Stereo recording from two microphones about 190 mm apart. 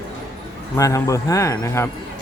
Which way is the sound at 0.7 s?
15° left (ahead or behind).